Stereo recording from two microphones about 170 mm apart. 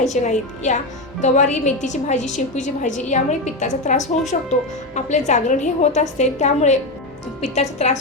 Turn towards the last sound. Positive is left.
turn(degrees=40)  # may be behind; listen again after turning